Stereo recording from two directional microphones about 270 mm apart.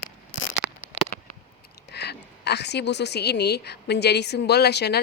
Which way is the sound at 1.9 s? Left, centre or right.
Left.